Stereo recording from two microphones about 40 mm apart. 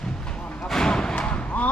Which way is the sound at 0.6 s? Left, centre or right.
Centre.